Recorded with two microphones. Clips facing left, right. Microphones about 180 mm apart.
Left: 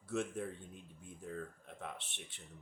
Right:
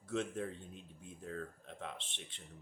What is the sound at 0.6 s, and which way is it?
Speech, 20° right (ahead or behind).